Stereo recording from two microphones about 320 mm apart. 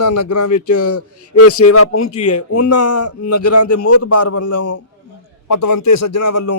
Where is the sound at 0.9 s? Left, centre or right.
Left.